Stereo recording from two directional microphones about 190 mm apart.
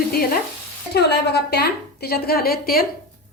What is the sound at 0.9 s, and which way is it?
A woman's voice, 60° left (ahead or behind).